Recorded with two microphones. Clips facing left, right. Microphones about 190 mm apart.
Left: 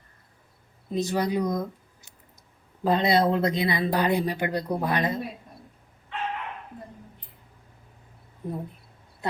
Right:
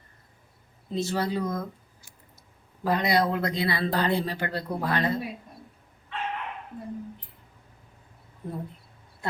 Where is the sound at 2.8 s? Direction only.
25° left (ahead or behind).